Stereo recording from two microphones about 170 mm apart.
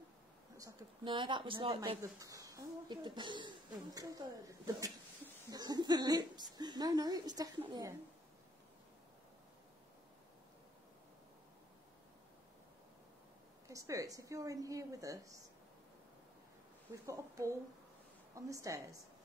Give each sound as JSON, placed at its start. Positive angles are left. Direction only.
{"t": 0.6, "sound": "speech", "side_deg": -25}
{"t": 2.0, "sound": "speech", "side_deg": -20}
{"t": 13.7, "sound": "speech", "side_deg": -20}
{"t": 17.0, "sound": "speech", "side_deg": -20}